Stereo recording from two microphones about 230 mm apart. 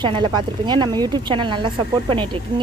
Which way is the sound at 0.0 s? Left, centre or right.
Centre.